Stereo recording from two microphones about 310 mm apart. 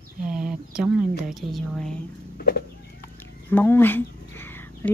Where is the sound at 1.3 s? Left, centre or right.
Centre.